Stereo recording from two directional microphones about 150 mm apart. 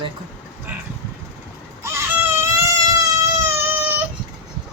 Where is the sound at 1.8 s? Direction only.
20° right (ahead or behind).